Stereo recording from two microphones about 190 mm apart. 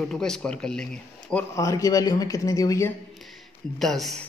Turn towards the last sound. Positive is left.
turn(degrees=0)  # may be behind; listen again after turning